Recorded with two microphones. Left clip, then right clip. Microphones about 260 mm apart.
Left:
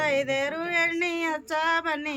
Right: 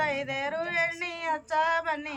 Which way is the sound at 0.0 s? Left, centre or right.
Left.